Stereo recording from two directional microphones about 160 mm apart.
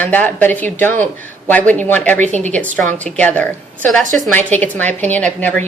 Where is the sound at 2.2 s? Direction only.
50° right (ahead or behind).